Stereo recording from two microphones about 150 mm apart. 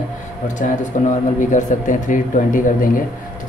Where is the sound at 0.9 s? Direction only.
60° left (ahead or behind).